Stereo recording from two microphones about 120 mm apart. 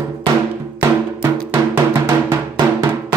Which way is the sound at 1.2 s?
15° right (ahead or behind).